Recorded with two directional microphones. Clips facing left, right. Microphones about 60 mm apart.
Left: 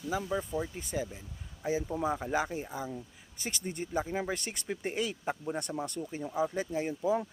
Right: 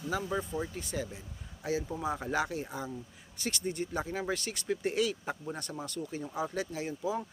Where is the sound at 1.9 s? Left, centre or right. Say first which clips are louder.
Left 4 dB; left.